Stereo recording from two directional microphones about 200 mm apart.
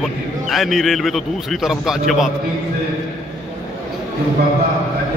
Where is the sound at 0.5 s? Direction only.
Centre (ahead or behind).